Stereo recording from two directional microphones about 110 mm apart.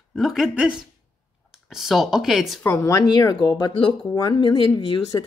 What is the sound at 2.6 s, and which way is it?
Speech, 25° left (ahead or behind).